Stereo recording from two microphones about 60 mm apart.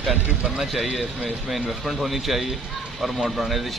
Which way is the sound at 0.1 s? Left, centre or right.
Centre.